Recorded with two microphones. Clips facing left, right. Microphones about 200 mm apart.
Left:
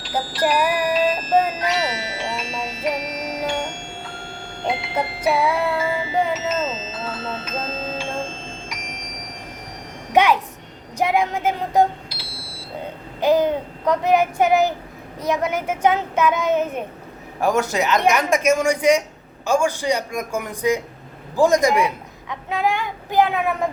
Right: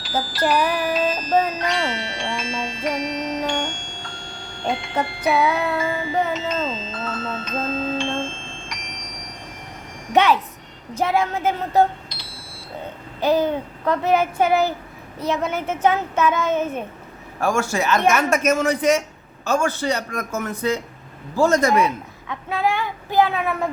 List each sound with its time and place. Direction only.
0.0 s music: 5° right (ahead or behind)
4.6 s a sound: 5° left (ahead or behind)
5.8 s music: 10° left (ahead or behind)
10.1 s a woman's voice: 15° left (ahead or behind)
13.2 s a man's voice: 15° left (ahead or behind)